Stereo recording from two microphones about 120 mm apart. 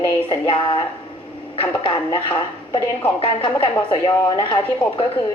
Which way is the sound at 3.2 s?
50° left (ahead or behind).